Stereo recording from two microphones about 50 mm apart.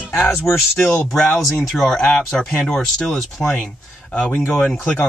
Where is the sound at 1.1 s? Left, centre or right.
Centre.